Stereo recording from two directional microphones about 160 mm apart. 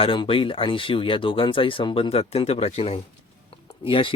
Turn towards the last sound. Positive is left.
turn(degrees=35)  # may be behind; listen again after turning